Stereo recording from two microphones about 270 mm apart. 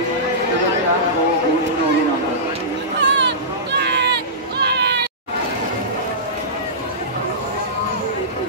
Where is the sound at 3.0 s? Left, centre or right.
Right.